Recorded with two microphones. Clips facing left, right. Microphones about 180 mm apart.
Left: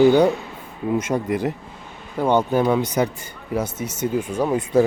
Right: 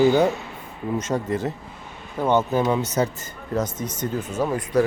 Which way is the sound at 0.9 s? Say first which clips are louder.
Left 2 dB; 10° left (ahead or behind).